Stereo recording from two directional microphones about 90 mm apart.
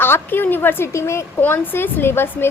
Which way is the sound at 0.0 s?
25° left (ahead or behind).